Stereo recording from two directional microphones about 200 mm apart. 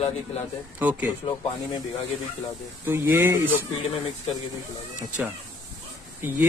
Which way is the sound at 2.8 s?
10° right (ahead or behind).